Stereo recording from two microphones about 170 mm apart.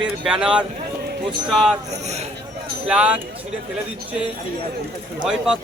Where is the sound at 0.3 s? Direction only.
5° right (ahead or behind).